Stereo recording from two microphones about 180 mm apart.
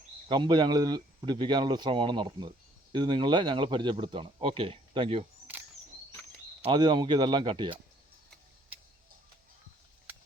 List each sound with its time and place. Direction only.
0.3 s speech: 25° right (ahead or behind)
6.7 s speech: 25° right (ahead or behind)